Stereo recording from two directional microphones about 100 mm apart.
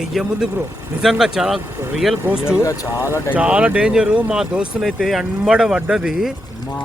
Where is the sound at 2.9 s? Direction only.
25° right (ahead or behind).